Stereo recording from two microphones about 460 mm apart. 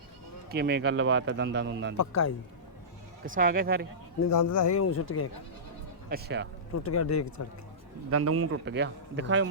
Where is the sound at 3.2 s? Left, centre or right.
Centre.